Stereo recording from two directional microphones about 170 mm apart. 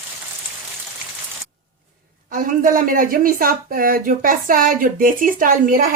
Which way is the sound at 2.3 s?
55° right (ahead or behind).